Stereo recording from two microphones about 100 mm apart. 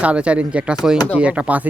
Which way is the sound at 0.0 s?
10° right (ahead or behind).